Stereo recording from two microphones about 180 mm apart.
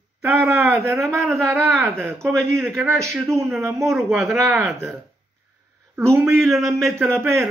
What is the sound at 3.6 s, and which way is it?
Speech, 15° right (ahead or behind).